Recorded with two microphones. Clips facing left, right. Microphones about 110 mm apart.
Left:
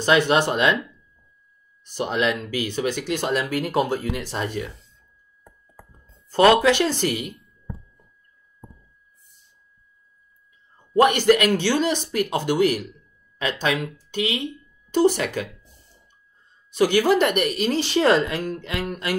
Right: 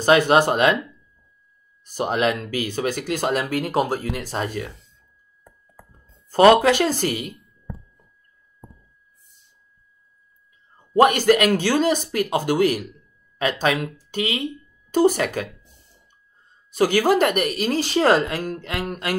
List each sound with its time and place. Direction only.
0.0 s speech: 45° right (ahead or behind)
1.9 s speech: 45° right (ahead or behind)
6.6 s speech: 45° right (ahead or behind)
11.0 s speech: 45° right (ahead or behind)
16.7 s speech: 40° right (ahead or behind)